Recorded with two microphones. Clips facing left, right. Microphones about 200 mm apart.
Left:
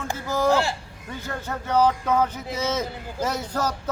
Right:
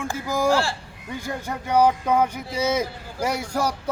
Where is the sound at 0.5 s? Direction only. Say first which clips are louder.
Even; 20° left (ahead or behind).